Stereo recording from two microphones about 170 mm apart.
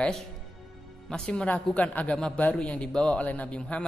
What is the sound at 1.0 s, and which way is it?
Speech, 5° left (ahead or behind).